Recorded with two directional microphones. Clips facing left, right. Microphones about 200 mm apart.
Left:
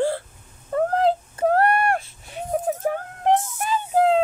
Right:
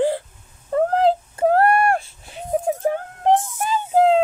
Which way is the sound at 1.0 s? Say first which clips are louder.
Right 3 dB; 30° right (ahead or behind).